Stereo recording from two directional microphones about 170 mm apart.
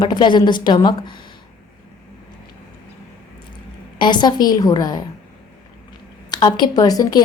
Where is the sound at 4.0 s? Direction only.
25° left (ahead or behind).